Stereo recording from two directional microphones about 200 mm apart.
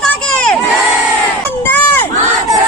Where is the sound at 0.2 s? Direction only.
5° left (ahead or behind).